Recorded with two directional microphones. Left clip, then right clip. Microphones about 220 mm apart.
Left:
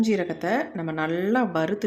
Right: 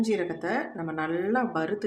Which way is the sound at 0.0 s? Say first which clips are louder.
Left 3 dB; 25° left (ahead or behind).